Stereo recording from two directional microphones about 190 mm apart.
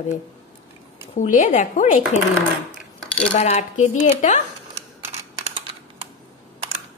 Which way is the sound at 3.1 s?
35° left (ahead or behind).